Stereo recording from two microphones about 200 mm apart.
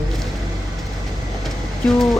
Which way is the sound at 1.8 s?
Centre (ahead or behind).